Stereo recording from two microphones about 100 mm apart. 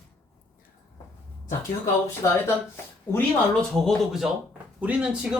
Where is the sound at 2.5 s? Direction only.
25° left (ahead or behind).